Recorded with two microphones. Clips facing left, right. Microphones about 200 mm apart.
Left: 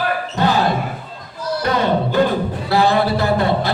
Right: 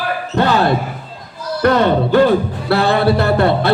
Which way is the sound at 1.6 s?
60° right (ahead or behind).